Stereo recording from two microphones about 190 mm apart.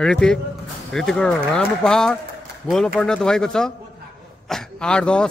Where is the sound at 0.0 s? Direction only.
5° left (ahead or behind).